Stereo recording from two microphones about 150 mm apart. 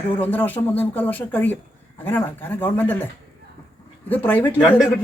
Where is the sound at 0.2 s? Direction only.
10° left (ahead or behind).